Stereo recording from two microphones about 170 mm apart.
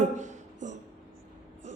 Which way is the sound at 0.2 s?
45° right (ahead or behind).